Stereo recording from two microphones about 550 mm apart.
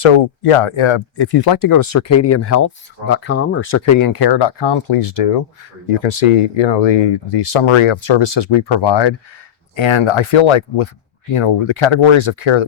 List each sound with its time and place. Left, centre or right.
0.0 s speech: left
1.5 s speech: left
5.0 s speech: left
6.6 s speech: left